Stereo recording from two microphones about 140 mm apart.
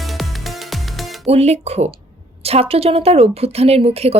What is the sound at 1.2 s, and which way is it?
A woman's voice, 50° right (ahead or behind).